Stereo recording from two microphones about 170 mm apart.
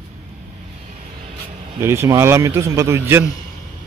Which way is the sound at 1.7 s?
15° right (ahead or behind).